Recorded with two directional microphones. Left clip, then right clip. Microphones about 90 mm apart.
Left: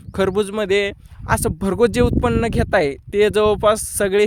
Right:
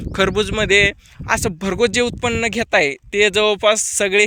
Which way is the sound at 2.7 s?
90° left.